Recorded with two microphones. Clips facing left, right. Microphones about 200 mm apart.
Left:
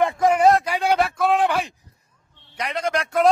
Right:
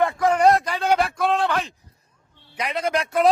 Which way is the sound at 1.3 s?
15° left (ahead or behind).